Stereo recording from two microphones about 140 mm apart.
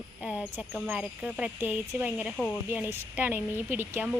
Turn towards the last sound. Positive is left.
turn(degrees=-15)  # may be behind; listen again after turning